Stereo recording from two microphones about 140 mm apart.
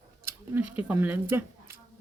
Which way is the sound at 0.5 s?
10° right (ahead or behind).